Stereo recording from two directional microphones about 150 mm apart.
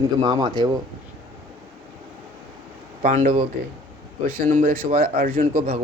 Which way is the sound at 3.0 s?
55° right (ahead or behind).